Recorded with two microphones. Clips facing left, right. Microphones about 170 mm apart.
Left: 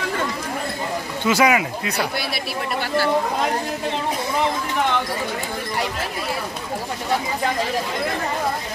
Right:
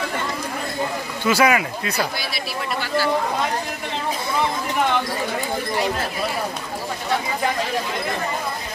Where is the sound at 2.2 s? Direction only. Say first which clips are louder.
Left 2 dB; 60° left (ahead or behind).